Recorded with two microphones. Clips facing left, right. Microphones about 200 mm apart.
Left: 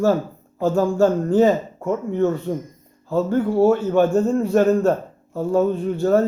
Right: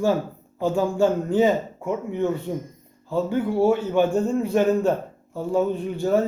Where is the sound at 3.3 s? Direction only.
40° left (ahead or behind).